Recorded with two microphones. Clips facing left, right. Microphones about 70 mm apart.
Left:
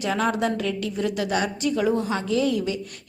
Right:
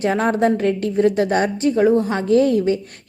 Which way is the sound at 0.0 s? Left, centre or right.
Right.